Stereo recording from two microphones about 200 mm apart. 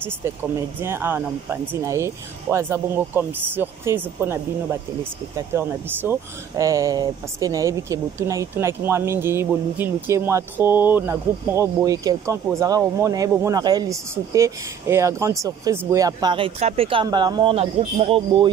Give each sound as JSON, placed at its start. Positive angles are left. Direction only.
{"t": 0.0, "sound": "speech", "side_deg": -10}